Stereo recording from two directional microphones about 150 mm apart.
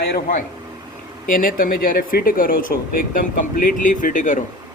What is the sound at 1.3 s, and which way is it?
Speech, 70° left (ahead or behind).